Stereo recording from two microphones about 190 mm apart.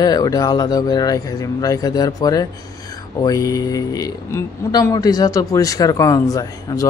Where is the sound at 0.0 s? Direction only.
20° left (ahead or behind).